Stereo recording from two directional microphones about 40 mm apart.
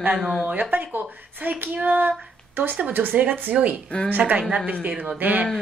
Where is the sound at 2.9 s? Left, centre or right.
Right.